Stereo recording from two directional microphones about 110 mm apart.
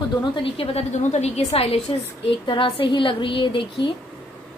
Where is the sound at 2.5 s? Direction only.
50° left (ahead or behind).